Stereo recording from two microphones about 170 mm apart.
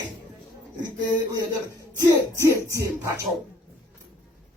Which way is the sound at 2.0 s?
20° right (ahead or behind).